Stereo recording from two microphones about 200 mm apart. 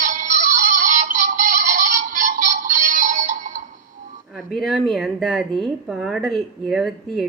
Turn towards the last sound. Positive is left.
turn(degrees=0)  # may be behind; listen again after turning